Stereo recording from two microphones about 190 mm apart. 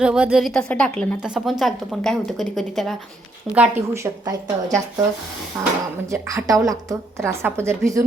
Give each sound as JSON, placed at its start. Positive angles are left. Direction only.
{"t": 0.0, "sound": "a woman's voice", "side_deg": -5}